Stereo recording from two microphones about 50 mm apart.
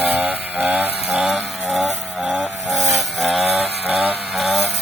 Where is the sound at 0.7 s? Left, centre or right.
Right.